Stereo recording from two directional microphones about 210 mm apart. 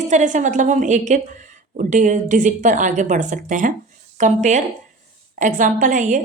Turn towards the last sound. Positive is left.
turn(degrees=-40)  # may be behind; listen again after turning